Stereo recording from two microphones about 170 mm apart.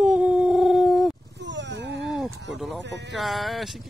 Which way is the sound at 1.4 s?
90° right.